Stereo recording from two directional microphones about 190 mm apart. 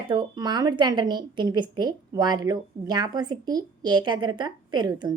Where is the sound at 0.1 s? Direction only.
25° right (ahead or behind).